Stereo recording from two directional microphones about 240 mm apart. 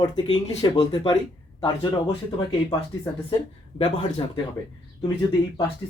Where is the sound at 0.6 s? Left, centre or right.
Centre.